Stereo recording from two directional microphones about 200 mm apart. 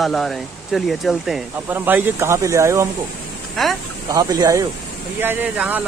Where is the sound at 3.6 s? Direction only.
Centre (ahead or behind).